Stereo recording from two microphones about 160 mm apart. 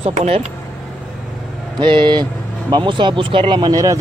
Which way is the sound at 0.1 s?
45° right (ahead or behind).